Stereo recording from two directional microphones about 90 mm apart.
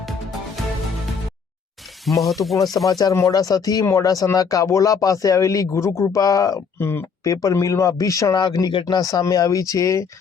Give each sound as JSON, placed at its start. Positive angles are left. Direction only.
{"t": 0.0, "sound": "music", "side_deg": 0}
{"t": 2.0, "sound": "speech", "side_deg": 0}
{"t": 2.7, "sound": "speech", "side_deg": 45}
{"t": 6.7, "sound": "speech", "side_deg": 25}
{"t": 7.4, "sound": "speech", "side_deg": 35}